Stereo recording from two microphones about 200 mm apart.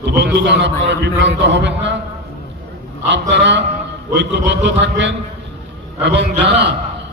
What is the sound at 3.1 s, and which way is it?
A man's voice, 60° right (ahead or behind).